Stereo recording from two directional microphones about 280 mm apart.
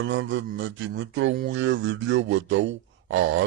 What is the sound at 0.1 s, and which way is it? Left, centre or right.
Speech, right.